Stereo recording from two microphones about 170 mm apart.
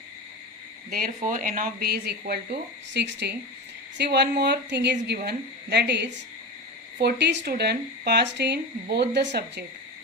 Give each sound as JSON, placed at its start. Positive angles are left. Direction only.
{"t": 0.9, "sound": "speech", "side_deg": -60}
{"t": 5.0, "sound": "a woman's voice", "side_deg": -70}
{"t": 5.7, "sound": "a woman's voice", "side_deg": -85}
{"t": 7.0, "sound": "speech", "side_deg": -80}